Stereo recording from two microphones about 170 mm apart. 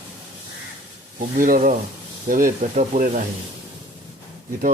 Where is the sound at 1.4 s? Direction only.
50° right (ahead or behind).